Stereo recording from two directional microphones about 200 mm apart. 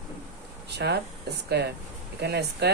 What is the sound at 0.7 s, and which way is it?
Speech, 55° right (ahead or behind).